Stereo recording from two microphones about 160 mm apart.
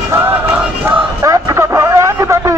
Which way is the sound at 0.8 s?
20° right (ahead or behind).